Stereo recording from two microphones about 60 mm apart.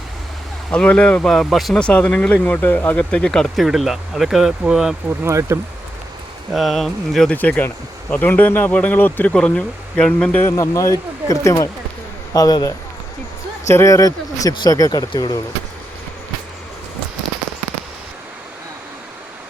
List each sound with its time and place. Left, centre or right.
0.7 s speech: centre
1.3 s speech: centre
1.7 s speech: centre
2.3 s speech: left
3.0 s speech: centre
5.0 s speech: right
6.5 s speech: centre
7.3 s speech: left
8.3 s speech: left
9.3 s speech: centre
10.5 s speech: left
12.3 s speech: left
13.7 s speech: left